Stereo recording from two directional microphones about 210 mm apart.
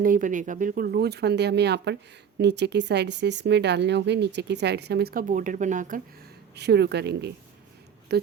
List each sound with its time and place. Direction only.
0.0 s speech: 40° right (ahead or behind)
6.6 s speech: 50° right (ahead or behind)